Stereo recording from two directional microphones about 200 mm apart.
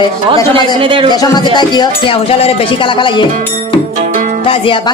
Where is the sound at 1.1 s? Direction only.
20° left (ahead or behind).